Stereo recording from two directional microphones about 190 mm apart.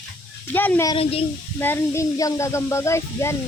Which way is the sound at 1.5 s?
10° left (ahead or behind).